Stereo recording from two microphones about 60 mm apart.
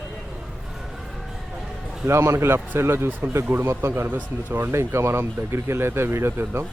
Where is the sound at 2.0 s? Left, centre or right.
Right.